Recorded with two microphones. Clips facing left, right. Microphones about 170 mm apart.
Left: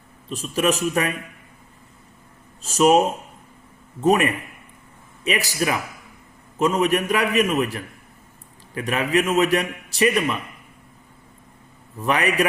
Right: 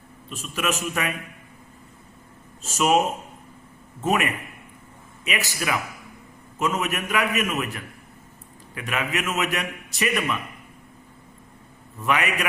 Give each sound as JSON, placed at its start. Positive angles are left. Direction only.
{"t": 0.3, "sound": "a man's voice", "side_deg": 35}
{"t": 2.6, "sound": "a man's voice", "side_deg": 35}
{"t": 4.0, "sound": "a man's voice", "side_deg": 35}
{"t": 8.7, "sound": "a man's voice", "side_deg": 35}
{"t": 11.9, "sound": "a man's voice", "side_deg": 35}